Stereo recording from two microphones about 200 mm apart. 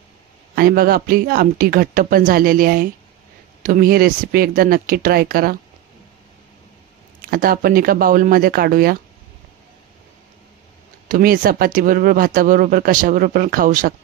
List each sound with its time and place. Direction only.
0.6 s speech: 50° right (ahead or behind)
7.2 s speech: 45° right (ahead or behind)
11.1 s speech: 45° right (ahead or behind)